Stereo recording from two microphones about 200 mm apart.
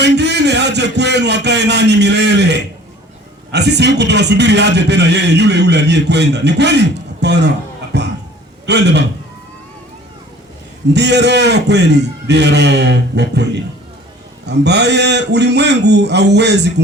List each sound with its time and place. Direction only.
0.2 s a man's voice: 60° right (ahead or behind)
10.9 s a man's voice: 60° right (ahead or behind)